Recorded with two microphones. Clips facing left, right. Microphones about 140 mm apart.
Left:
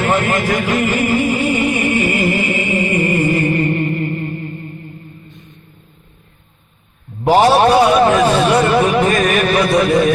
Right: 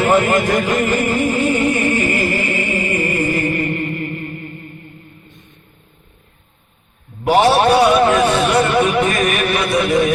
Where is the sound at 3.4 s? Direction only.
25° left (ahead or behind).